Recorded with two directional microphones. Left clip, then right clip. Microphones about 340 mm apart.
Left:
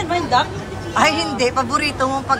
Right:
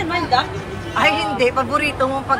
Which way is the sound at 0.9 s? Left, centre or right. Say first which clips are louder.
Even; centre.